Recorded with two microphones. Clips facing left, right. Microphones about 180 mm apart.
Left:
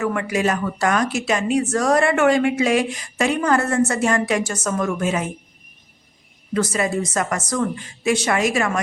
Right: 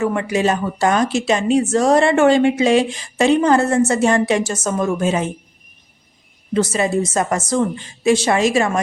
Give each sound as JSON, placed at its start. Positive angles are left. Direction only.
{"t": 0.0, "sound": "a woman's voice", "side_deg": -25}
{"t": 6.5, "sound": "a woman's voice", "side_deg": -25}